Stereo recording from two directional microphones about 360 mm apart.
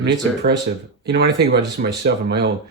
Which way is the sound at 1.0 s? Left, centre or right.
Right.